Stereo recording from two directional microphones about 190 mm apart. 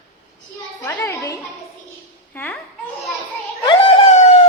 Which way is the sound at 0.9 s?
10° left (ahead or behind).